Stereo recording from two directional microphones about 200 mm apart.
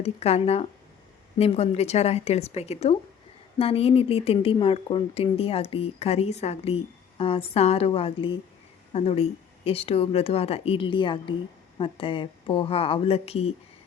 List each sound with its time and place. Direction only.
0.0 s a woman's voice: 30° left (ahead or behind)